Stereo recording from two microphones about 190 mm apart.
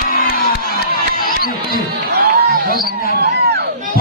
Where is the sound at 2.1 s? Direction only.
55° right (ahead or behind).